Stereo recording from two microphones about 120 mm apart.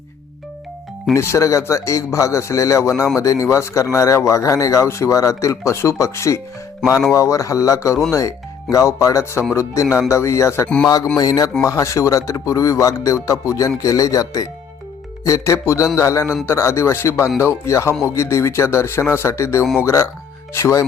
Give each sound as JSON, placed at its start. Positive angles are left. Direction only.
{"t": 1.1, "sound": "speech", "side_deg": 25}